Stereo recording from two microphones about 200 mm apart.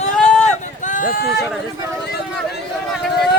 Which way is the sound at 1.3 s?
Centre (ahead or behind).